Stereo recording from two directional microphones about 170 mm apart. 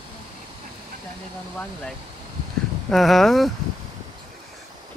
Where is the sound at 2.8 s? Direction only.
Centre (ahead or behind).